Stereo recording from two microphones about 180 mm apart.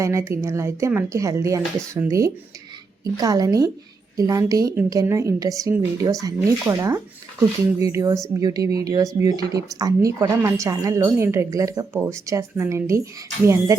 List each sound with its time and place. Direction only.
0.0 s a woman's voice: 15° right (ahead or behind)